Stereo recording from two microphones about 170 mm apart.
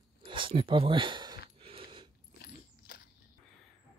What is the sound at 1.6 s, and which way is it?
Mechanisms, 35° right (ahead or behind).